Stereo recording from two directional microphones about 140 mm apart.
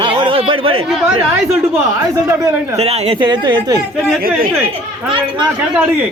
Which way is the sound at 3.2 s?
35° right (ahead or behind).